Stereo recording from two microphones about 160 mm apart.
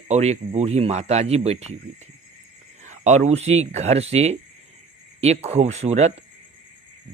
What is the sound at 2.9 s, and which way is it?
Speech, 45° right (ahead or behind).